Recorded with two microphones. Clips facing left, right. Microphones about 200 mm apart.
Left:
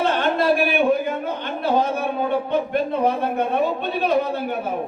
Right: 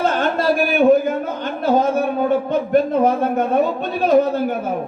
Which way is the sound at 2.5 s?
45° right (ahead or behind).